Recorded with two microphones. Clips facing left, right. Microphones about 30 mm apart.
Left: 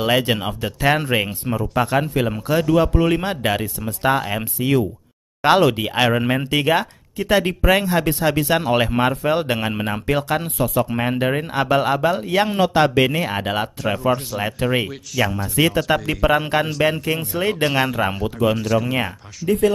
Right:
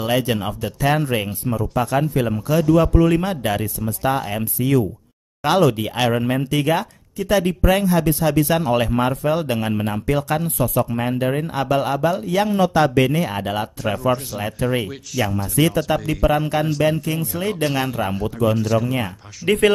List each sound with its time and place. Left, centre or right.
0.4 s speech: centre
4.1 s speech: centre
4.4 s speech: left
6.3 s speech: left
12.3 s speech: left
13.3 s speech: left
14.9 s speech: centre
15.9 s speech: left
17.7 s speech: centre
18.6 s speech: centre
19.4 s speech: right